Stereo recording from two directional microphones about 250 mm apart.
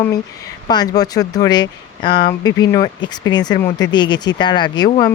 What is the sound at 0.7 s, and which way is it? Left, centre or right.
Speech, centre.